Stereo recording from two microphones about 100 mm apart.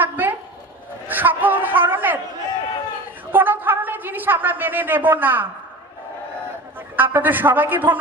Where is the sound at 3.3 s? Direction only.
20° right (ahead or behind).